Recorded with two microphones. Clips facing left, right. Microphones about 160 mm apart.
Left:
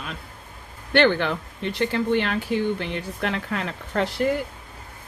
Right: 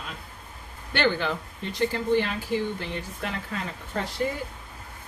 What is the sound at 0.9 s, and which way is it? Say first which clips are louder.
Speech: left 6 dB; 60° left (ahead or behind).